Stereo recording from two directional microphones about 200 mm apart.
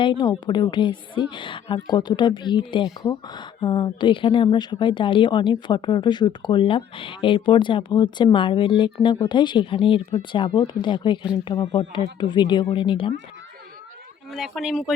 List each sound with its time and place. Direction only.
0.0 s a woman's voice: 20° left (ahead or behind)
14.3 s speech: centre (ahead or behind)